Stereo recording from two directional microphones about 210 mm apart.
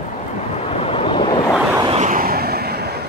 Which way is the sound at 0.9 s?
30° left (ahead or behind).